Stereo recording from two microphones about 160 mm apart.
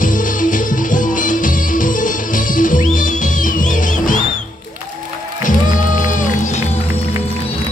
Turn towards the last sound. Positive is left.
turn(degrees=50)  # may be behind; listen again after turning